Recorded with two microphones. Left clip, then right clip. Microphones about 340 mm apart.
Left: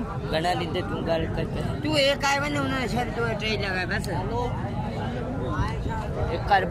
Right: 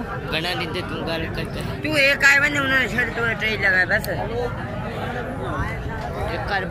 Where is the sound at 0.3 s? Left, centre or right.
Left.